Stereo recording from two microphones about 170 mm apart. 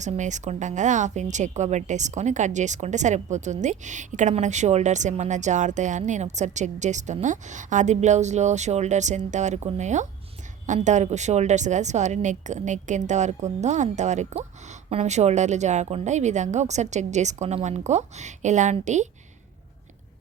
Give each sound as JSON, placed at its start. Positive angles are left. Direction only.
{"t": 0.0, "sound": "a woman's voice", "side_deg": -45}